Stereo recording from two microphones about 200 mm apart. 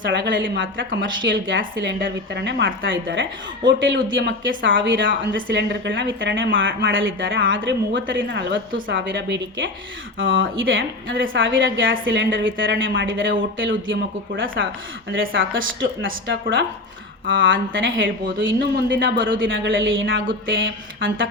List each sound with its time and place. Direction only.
0.0 s a woman's voice: 65° right (ahead or behind)
10.2 s a woman's voice: 75° right (ahead or behind)